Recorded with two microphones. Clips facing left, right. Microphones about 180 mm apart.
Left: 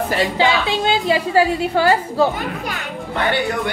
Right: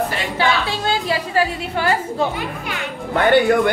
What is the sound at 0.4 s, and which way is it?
A woman's voice, 20° left (ahead or behind).